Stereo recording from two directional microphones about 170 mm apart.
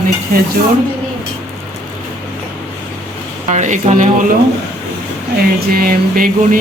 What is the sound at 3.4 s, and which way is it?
Speech, 45° right (ahead or behind).